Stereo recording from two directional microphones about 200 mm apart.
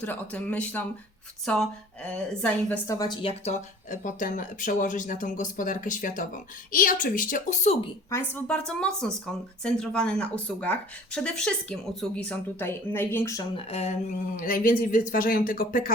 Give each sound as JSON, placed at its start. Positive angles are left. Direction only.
{"t": 0.0, "sound": "speech", "side_deg": 5}
{"t": 3.8, "sound": "speech", "side_deg": 40}
{"t": 8.1, "sound": "speech", "side_deg": 10}
{"t": 13.7, "sound": "speech", "side_deg": 35}
{"t": 14.3, "sound": "speech", "side_deg": 45}